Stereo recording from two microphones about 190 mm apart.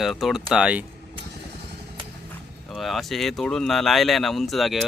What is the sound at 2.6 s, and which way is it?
Speech, centre (ahead or behind).